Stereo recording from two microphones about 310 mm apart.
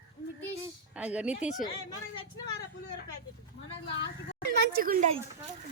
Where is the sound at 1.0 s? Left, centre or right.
Centre.